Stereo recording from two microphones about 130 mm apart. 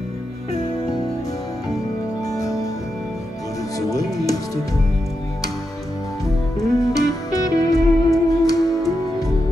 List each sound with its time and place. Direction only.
2.2 s music: 25° left (ahead or behind)
3.9 s music: 25° left (ahead or behind)
6.8 s music: 25° left (ahead or behind)